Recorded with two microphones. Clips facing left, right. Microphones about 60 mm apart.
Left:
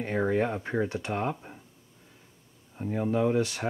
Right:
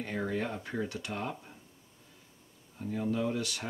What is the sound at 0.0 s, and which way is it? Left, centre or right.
Speech, left.